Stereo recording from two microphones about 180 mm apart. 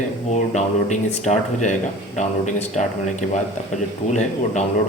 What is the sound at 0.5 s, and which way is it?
Speech, 40° left (ahead or behind).